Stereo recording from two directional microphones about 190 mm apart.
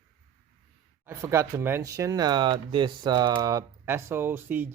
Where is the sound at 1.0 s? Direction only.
15° right (ahead or behind).